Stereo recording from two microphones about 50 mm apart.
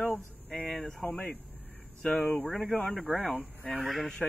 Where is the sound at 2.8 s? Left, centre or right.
Centre.